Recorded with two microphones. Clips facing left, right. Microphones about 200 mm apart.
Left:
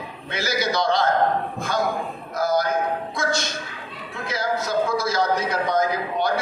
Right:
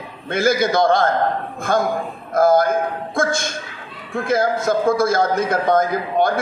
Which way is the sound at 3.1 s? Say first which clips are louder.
Right 4 dB; 50° right (ahead or behind).